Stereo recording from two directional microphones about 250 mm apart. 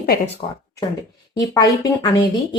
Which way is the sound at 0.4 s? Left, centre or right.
Centre.